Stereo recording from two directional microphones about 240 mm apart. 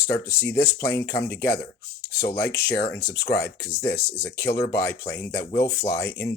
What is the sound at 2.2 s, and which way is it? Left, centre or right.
Speech, centre.